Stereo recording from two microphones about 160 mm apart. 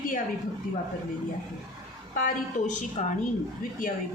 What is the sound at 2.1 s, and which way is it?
Speech, 55° left (ahead or behind).